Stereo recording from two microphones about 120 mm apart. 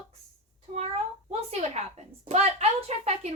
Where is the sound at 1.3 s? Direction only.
65° right (ahead or behind).